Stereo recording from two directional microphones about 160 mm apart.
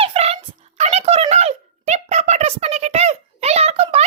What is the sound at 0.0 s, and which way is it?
Music, 40° right (ahead or behind).